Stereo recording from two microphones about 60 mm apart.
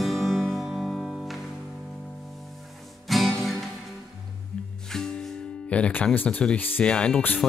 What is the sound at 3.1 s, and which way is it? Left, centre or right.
Music, centre.